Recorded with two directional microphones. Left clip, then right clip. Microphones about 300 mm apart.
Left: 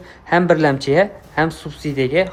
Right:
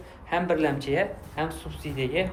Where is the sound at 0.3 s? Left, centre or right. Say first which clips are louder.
Left 10 dB; left.